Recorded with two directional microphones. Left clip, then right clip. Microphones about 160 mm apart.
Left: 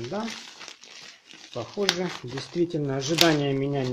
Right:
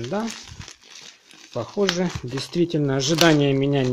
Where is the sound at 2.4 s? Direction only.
55° right (ahead or behind).